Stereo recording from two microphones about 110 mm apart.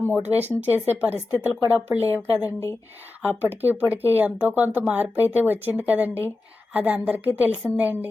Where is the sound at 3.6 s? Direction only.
15° right (ahead or behind).